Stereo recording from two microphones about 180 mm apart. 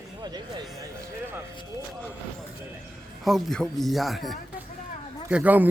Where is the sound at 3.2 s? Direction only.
Centre (ahead or behind).